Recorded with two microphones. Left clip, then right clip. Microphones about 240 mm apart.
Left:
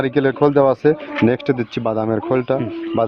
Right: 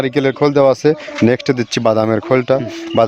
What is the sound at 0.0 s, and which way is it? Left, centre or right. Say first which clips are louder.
Speech: right 1 dB; right.